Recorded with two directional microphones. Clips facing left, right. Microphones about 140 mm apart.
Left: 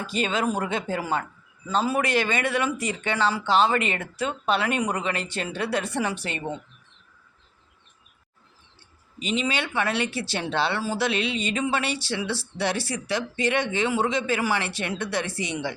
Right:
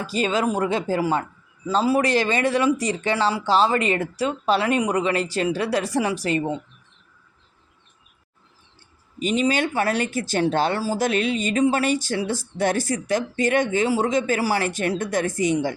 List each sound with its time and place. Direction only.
0.0 s speech: 35° right (ahead or behind)
9.1 s speech: 45° right (ahead or behind)